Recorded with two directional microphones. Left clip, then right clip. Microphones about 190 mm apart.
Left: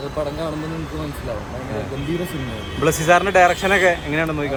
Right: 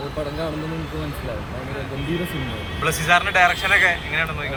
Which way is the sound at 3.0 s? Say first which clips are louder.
Left 2 dB; 20° left (ahead or behind).